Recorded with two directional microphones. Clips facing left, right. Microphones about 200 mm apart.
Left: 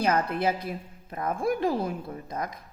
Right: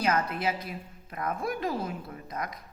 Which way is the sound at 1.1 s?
30° left (ahead or behind).